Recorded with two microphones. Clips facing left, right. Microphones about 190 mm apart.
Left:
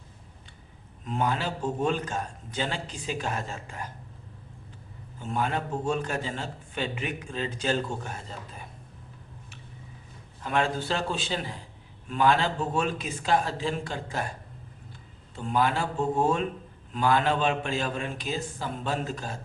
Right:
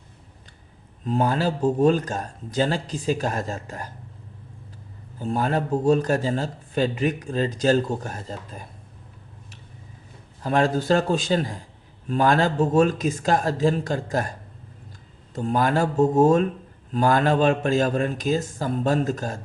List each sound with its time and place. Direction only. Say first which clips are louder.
1.0 s speech: right 6 dB; 35° right (ahead or behind)
5.2 s speech: right 6 dB; 40° right (ahead or behind)
10.4 s speech: right 6 dB; 40° right (ahead or behind)
15.4 s speech: right 5 dB; 40° right (ahead or behind)